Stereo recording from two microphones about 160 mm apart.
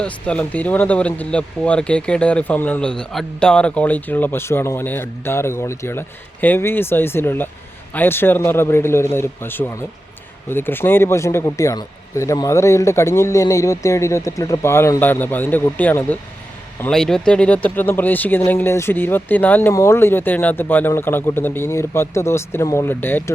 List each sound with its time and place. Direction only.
0.0 s speech: 5° left (ahead or behind)